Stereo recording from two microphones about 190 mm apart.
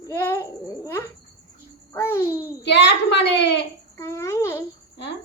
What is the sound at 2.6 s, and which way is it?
Speech, 65° left (ahead or behind).